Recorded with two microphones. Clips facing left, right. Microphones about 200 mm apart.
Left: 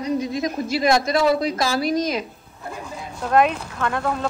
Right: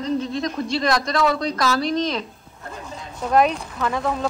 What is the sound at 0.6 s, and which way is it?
Speech, 25° left (ahead or behind).